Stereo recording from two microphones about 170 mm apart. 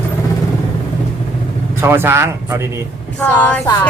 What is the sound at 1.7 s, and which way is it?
Speech, 15° right (ahead or behind).